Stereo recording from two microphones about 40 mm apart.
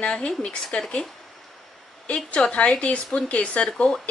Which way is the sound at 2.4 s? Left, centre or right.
Left.